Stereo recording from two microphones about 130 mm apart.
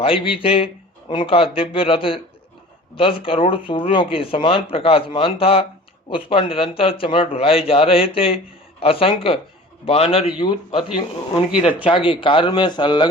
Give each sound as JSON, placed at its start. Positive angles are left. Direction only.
{"t": 0.0, "sound": "a man's voice", "side_deg": 45}
{"t": 11.9, "sound": "speech", "side_deg": 45}